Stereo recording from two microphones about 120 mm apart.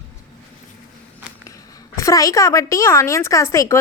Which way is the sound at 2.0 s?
25° left (ahead or behind).